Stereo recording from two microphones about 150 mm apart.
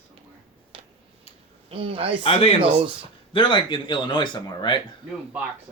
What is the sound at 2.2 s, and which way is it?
Speech, 40° left (ahead or behind).